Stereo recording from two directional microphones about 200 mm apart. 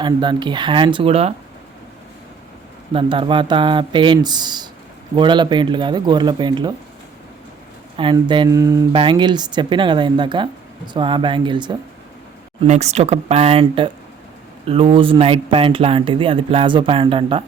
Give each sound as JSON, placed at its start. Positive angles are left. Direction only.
{"t": 0.0, "sound": "speech", "side_deg": -20}
{"t": 2.9, "sound": "speech", "side_deg": -25}
{"t": 7.9, "sound": "speech", "side_deg": -25}
{"t": 12.6, "sound": "speech", "side_deg": -35}